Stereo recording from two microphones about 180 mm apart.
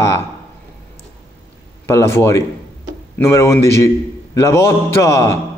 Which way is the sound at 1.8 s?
15° left (ahead or behind).